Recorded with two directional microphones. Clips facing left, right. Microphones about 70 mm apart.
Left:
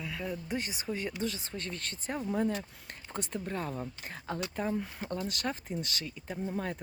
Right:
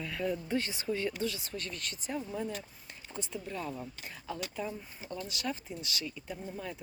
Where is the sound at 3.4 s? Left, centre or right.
Left.